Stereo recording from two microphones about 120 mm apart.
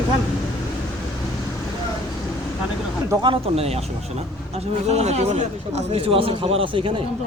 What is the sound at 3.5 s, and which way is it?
Speech, 55° right (ahead or behind).